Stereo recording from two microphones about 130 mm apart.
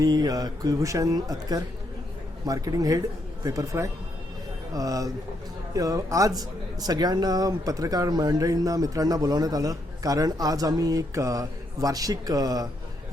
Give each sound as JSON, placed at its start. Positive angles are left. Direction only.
{"t": 0.0, "sound": "a man's voice", "side_deg": -30}